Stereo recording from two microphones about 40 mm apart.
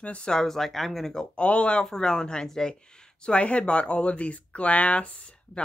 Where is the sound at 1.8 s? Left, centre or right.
Centre.